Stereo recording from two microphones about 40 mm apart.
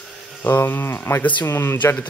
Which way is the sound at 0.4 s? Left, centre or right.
Left.